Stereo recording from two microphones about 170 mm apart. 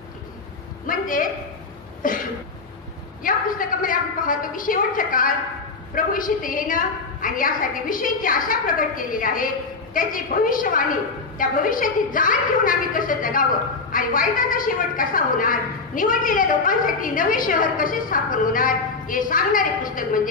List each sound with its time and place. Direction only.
0.8 s a man's voice: 55° left (ahead or behind)
3.3 s a woman's voice: 55° left (ahead or behind)